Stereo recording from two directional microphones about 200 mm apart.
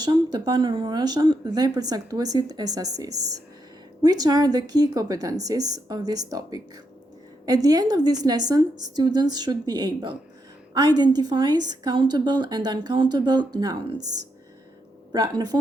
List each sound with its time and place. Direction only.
0.0 s a woman's voice: 20° right (ahead or behind)